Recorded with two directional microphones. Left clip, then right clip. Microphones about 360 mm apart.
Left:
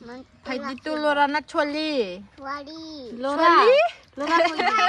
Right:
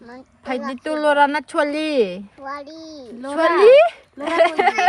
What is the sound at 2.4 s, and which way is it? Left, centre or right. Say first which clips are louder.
Speech: left 1 dB; centre.